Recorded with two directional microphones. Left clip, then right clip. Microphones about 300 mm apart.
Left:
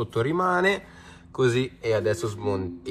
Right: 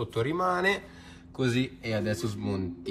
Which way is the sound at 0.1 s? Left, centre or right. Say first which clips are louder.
Left 4 dB; centre.